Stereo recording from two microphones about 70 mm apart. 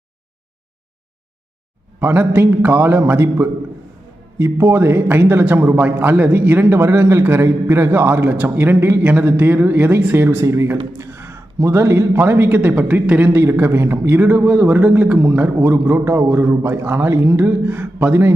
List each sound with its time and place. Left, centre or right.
2.0 s a man's voice: right
4.4 s a man's voice: right
13.4 s a man's voice: right